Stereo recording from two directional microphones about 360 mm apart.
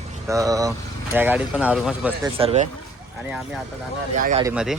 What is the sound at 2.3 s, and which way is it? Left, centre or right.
Speech, centre.